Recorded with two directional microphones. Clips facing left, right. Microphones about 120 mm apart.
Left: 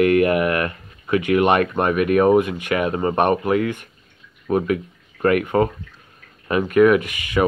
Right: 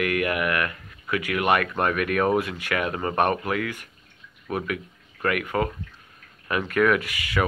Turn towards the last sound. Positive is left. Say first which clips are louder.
# left 6 dB
turn(degrees=20)  # may be behind; listen again after turning